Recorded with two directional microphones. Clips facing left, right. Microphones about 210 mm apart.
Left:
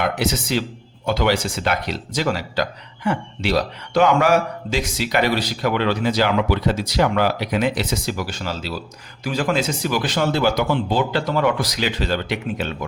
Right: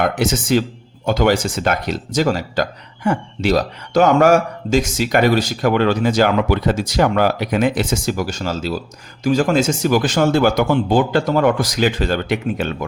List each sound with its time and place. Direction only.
0.0 s speech: 45° right (ahead or behind)